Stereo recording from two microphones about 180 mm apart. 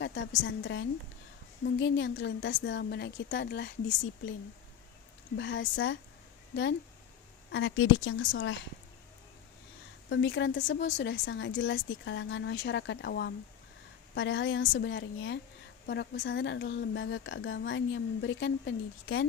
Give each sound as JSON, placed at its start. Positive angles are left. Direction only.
{"t": 0.0, "sound": "a woman's voice", "side_deg": 90}
{"t": 5.4, "sound": "a woman's voice", "side_deg": 90}
{"t": 7.5, "sound": "a woman's voice", "side_deg": 90}
{"t": 10.1, "sound": "a woman's voice", "side_deg": 90}
{"t": 10.8, "sound": "a woman's voice", "side_deg": 80}
{"t": 14.2, "sound": "a woman's voice", "side_deg": 90}